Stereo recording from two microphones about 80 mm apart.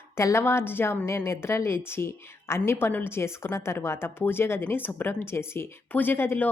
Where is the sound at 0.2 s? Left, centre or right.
Left.